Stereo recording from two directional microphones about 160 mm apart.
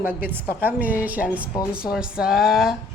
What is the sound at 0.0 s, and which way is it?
A woman's voice, 10° right (ahead or behind).